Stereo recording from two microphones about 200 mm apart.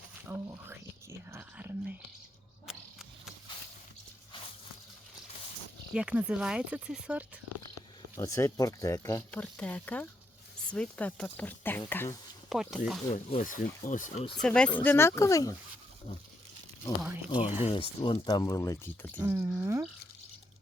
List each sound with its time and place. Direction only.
0.3 s a sound: 10° right (ahead or behind)
1.3 s whispering: 10° right (ahead or behind)
5.9 s speech: 5° right (ahead or behind)
8.1 s speech: 15° left (ahead or behind)
12.5 s speech: centre (ahead or behind)
13.1 s speech: 40° left (ahead or behind)
14.3 s speech: 5° left (ahead or behind)
17.6 s speech: 30° left (ahead or behind); by 19.2 s 10° left (ahead or behind)
19.2 s speech: 10° right (ahead or behind)